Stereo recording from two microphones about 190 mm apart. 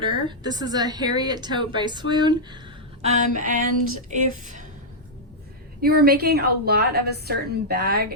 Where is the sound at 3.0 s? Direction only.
40° right (ahead or behind).